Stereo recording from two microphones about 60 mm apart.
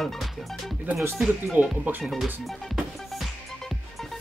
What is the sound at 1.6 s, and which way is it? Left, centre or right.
Speech, right.